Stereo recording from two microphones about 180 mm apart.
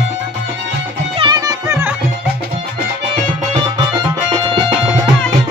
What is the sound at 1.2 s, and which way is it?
Music, 20° right (ahead or behind).